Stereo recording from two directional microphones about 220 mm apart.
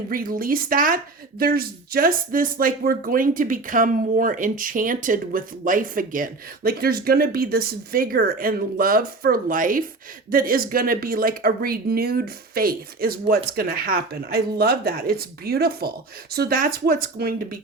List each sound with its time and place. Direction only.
0.1 s speech: 40° right (ahead or behind)